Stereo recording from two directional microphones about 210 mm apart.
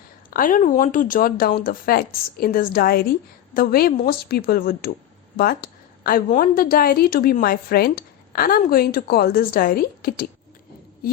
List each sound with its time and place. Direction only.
0.3 s a woman's voice: 40° left (ahead or behind)